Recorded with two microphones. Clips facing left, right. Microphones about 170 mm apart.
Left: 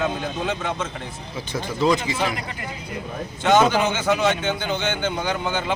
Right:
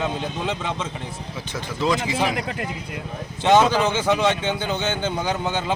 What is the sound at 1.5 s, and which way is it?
Speech, centre (ahead or behind).